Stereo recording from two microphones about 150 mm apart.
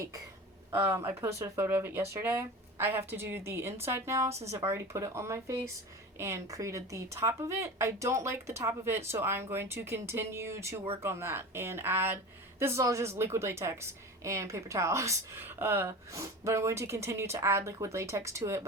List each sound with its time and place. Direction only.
0.0 s a woman's voice: 25° right (ahead or behind)